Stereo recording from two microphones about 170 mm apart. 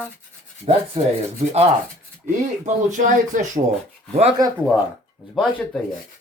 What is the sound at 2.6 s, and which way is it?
Speech, 50° right (ahead or behind).